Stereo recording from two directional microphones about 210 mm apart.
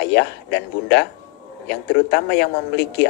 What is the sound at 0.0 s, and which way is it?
Speech, 55° left (ahead or behind).